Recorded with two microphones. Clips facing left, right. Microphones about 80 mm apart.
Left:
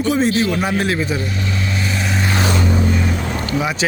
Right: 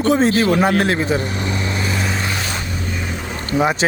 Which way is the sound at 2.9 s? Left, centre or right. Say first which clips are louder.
Left 5 dB; centre.